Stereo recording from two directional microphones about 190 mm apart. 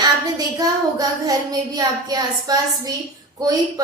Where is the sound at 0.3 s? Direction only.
20° right (ahead or behind).